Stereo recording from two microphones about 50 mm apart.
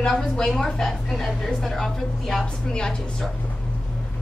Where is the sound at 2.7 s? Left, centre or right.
Centre.